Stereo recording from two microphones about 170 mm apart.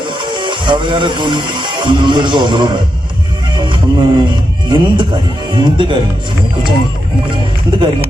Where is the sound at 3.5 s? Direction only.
25° right (ahead or behind).